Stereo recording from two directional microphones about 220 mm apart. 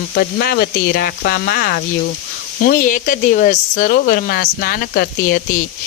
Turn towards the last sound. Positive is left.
turn(degrees=45)  # may be behind; listen again after turning